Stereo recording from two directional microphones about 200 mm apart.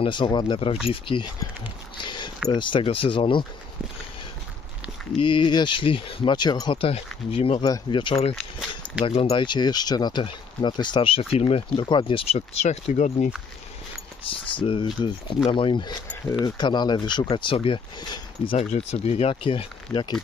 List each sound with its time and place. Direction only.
0.0 s speech: 25° left (ahead or behind)
2.0 s a sound: 25° left (ahead or behind)
2.5 s speech: 25° left (ahead or behind)
5.1 s speech: 25° left (ahead or behind)
8.4 s a sound: centre (ahead or behind)
9.0 s speech: 25° left (ahead or behind)
14.2 s speech: 25° left (ahead or behind)